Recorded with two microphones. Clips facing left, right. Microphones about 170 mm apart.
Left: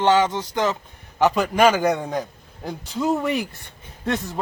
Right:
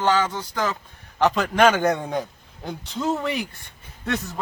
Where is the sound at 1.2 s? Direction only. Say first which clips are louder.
Left 1 dB; 5° left (ahead or behind).